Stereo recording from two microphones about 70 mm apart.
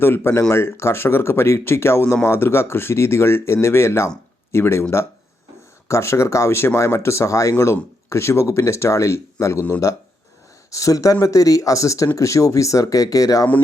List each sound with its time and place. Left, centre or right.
0.0 s speech: left
10.7 s speech: left